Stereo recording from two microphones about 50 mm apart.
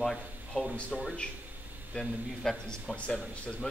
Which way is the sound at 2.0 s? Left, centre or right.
Centre.